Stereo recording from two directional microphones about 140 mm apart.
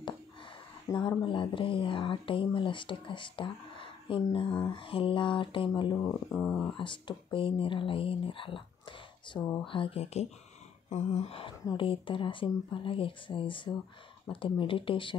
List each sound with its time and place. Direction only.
0.8 s speech: 30° left (ahead or behind)
6.3 s speech: 5° left (ahead or behind)
6.8 s speech: 35° left (ahead or behind)
9.7 s a sound: 40° left (ahead or behind)
11.6 s speech: 40° left (ahead or behind)